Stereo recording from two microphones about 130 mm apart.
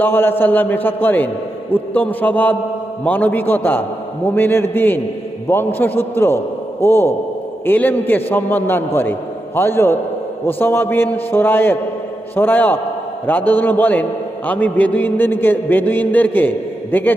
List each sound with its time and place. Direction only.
0.0 s a man's voice: 15° left (ahead or behind)